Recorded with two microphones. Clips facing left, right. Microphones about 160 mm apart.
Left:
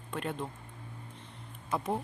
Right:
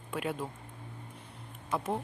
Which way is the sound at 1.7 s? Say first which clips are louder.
Even; centre (ahead or behind).